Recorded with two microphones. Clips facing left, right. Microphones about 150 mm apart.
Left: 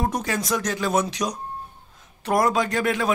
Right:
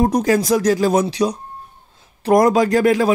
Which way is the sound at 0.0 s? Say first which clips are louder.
Right 10 dB; 40° right (ahead or behind).